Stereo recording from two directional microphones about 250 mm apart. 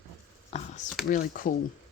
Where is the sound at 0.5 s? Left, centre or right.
Left.